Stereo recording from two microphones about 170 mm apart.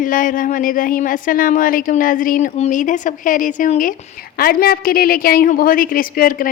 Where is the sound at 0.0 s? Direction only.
50° left (ahead or behind).